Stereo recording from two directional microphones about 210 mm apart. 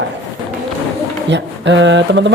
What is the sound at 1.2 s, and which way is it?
Speech, 55° right (ahead or behind).